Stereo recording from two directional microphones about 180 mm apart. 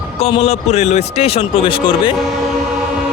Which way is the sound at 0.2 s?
35° left (ahead or behind).